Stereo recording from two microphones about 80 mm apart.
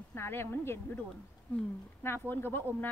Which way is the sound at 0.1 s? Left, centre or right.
Left.